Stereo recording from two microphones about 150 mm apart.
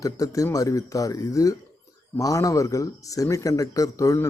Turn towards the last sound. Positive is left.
turn(degrees=20)  # may be behind; listen again after turning